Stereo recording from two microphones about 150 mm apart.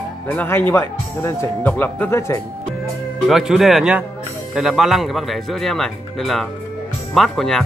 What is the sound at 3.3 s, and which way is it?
Speech, centre (ahead or behind).